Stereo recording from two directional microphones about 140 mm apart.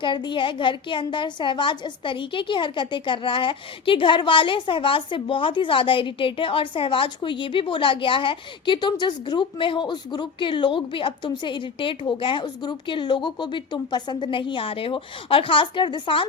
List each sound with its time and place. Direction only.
0.0 s a woman's voice: 35° left (ahead or behind)